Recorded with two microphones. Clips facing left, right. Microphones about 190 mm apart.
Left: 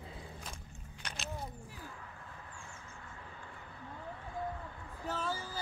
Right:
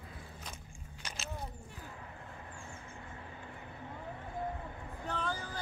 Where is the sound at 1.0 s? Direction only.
Centre (ahead or behind).